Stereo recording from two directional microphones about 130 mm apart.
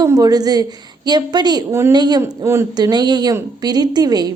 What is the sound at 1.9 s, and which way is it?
Speech, 35° right (ahead or behind).